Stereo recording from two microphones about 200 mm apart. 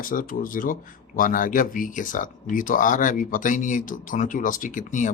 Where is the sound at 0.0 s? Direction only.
45° left (ahead or behind).